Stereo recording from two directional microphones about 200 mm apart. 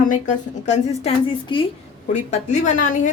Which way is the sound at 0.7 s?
30° left (ahead or behind).